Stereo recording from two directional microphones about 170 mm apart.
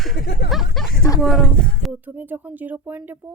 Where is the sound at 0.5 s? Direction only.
Centre (ahead or behind).